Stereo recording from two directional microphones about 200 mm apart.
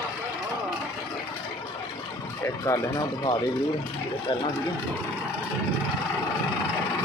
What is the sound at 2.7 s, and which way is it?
Speech, 15° left (ahead or behind).